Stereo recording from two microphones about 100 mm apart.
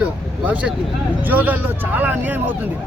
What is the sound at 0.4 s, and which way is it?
Speech, 15° right (ahead or behind).